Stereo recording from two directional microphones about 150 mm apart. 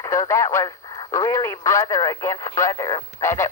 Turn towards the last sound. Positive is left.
turn(degrees=20)  # may be behind; listen again after turning